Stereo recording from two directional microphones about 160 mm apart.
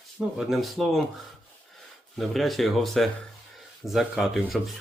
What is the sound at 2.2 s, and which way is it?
Speech, centre (ahead or behind).